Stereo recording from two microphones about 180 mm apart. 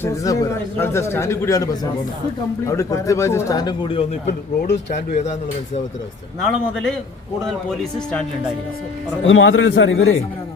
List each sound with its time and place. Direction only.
0.0 s a man's voice: 15° left (ahead or behind); by 5.8 s 40° left (ahead or behind)
6.4 s a man's voice: 5° left (ahead or behind)
9.2 s a man's voice: 90° left